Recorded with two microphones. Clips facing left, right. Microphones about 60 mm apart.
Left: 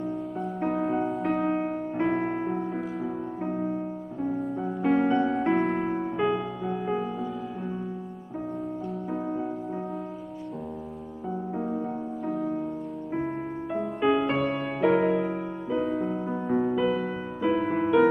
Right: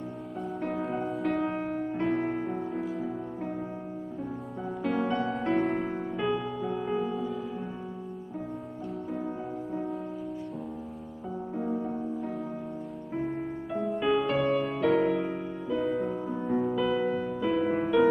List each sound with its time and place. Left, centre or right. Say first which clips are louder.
0.4 s music: left 3 dB; centre
2.7 s music: left 1 dB; centre
3.1 s music: left 3 dB; centre
4.9 s music: left 6 dB; left
5.4 s music: left 3 dB; centre
9.1 s music: left 5 dB; centre
12.3 s music: left 6 dB; centre
13.7 s music: left 3 dB; centre
14.2 s music: even; centre
15.8 s music: left 1 dB; centre
16.2 s music: left 2 dB; centre
17.7 s music: left 4 dB; centre